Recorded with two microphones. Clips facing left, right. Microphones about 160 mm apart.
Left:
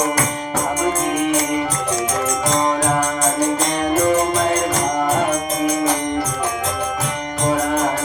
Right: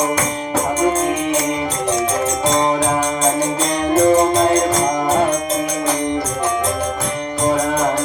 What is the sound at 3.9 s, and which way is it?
Music, 30° right (ahead or behind).